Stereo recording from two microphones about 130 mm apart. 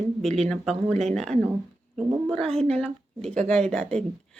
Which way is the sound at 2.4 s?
5° left (ahead or behind).